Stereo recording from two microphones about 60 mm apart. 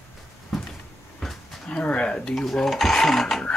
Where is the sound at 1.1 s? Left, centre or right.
Centre.